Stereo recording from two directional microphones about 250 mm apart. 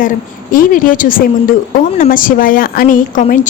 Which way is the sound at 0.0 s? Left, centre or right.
Left.